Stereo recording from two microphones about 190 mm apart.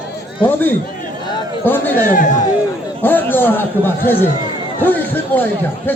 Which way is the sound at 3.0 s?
10° left (ahead or behind).